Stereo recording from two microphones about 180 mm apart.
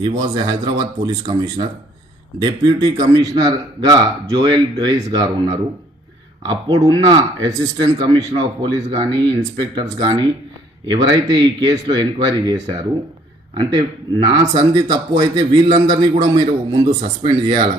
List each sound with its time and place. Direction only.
0.0 s speech: 25° right (ahead or behind)